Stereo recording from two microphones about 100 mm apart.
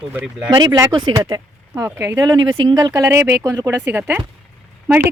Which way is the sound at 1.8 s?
25° right (ahead or behind).